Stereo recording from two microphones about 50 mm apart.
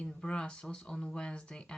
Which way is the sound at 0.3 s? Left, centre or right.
Centre.